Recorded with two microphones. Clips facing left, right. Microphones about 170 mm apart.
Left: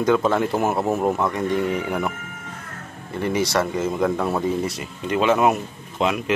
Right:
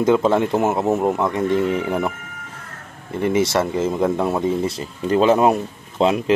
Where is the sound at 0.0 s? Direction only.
25° right (ahead or behind).